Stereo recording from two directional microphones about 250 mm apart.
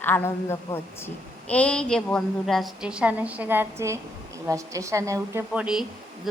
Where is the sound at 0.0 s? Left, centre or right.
Centre.